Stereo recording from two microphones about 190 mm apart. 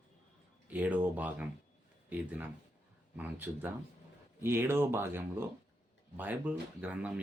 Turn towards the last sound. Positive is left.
turn(degrees=-10)  # may be behind; listen again after turning